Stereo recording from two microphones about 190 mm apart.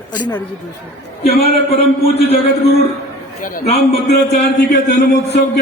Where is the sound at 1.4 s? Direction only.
35° left (ahead or behind).